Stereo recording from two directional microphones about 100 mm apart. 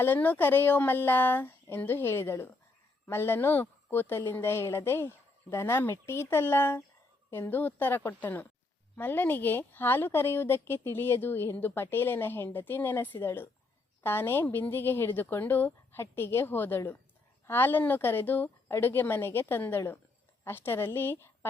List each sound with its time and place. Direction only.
0.0 s a woman's voice: 20° left (ahead or behind)